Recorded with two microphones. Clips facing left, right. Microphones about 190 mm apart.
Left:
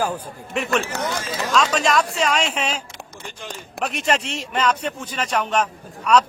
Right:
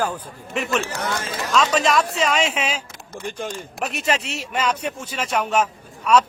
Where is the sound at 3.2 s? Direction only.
50° right (ahead or behind).